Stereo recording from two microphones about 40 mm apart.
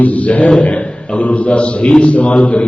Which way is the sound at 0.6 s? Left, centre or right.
Left.